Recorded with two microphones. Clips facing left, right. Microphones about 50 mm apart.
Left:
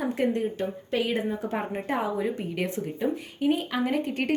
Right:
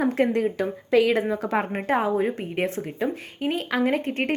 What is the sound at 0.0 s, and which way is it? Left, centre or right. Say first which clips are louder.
A woman's voice: right 4 dB; right.